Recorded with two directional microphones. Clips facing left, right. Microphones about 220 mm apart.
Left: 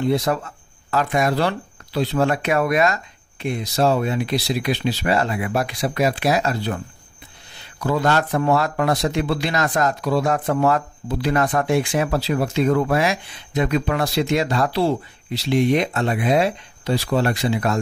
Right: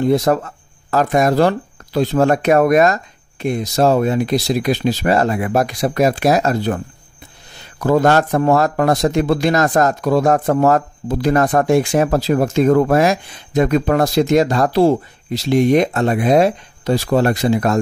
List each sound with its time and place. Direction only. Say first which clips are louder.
0.0 s speech: right 5 dB; 45° right (ahead or behind)
7.8 s speech: right 6 dB; 45° right (ahead or behind)